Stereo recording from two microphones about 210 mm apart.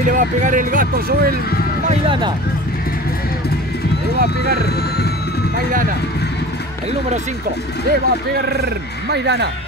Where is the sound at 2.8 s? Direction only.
45° left (ahead or behind).